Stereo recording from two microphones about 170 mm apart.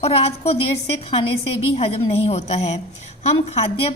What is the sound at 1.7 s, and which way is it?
A woman's voice, 40° left (ahead or behind).